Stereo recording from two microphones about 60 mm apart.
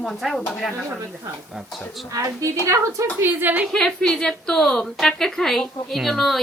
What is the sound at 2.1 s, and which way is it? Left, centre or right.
Speech, right.